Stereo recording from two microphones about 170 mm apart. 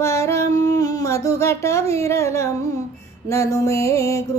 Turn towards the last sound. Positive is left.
turn(degrees=15)  # may be behind; listen again after turning